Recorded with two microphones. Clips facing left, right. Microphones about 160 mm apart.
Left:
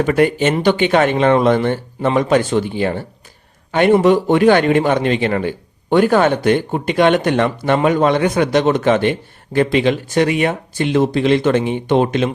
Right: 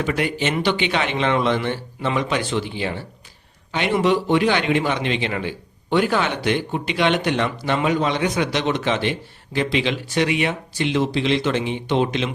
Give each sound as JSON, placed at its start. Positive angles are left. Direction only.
{"t": 0.0, "sound": "a man's voice", "side_deg": 50}